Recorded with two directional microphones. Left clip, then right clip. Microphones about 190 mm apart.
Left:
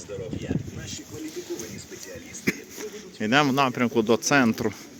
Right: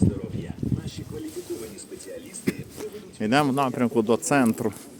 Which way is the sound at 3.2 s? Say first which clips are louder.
Left 1 dB; 10° right (ahead or behind).